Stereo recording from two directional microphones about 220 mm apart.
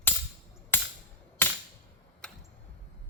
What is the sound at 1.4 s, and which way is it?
Cap gun, 10° left (ahead or behind).